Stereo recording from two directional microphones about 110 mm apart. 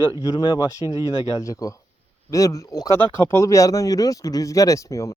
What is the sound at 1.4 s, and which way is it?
Speech, 30° left (ahead or behind).